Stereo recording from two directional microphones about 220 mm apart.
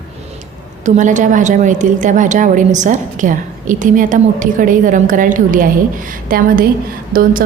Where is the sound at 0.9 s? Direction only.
35° right (ahead or behind).